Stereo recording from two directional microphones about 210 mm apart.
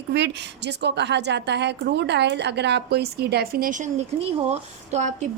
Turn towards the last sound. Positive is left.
turn(degrees=-30)  # may be behind; listen again after turning